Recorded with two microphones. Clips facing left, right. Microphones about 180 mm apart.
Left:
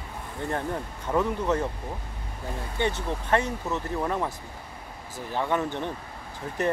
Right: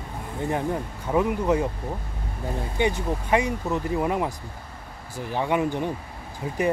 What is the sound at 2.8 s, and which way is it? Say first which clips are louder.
Speech: right 3 dB; 10° right (ahead or behind).